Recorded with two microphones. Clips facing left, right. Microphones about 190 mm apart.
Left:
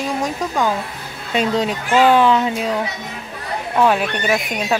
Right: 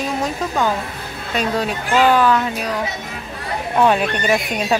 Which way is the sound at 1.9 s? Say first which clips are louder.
Left 1 dB; 10° left (ahead or behind).